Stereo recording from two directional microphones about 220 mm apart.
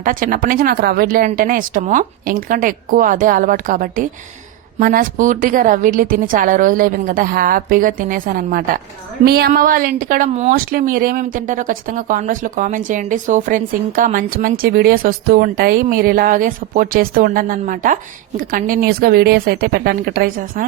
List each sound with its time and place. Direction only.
0.0 s speech: 40° right (ahead or behind)